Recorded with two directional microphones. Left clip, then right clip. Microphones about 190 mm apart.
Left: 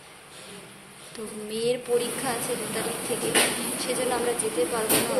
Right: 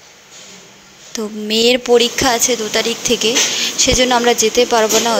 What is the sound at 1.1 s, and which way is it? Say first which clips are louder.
A woman's voice: right 16 dB; 40° right (ahead or behind).